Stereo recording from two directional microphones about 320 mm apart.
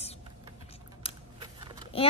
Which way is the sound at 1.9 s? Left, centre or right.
Centre.